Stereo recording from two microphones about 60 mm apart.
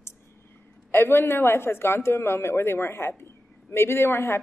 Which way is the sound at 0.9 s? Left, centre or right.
Left.